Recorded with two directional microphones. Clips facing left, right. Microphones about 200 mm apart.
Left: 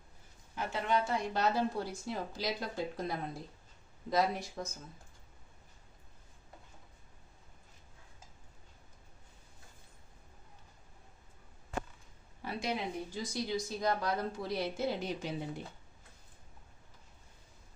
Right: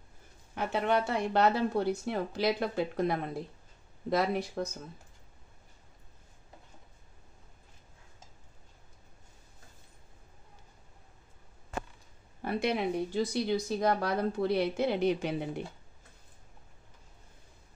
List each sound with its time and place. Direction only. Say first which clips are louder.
0.6 s speech: right 4 dB; 60° right (ahead or behind)
12.4 s speech: right 6 dB; 60° right (ahead or behind)